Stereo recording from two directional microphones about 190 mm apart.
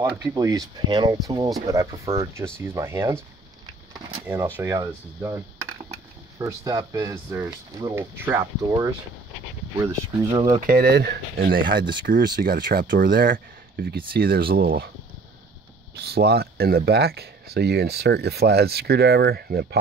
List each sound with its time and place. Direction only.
0.2 s speech: 20° right (ahead or behind)
4.6 s speech: 15° right (ahead or behind)
10.5 s speech: 45° right (ahead or behind)
16.1 s speech: 55° right (ahead or behind)